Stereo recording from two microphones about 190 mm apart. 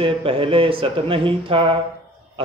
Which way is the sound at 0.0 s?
30° right (ahead or behind).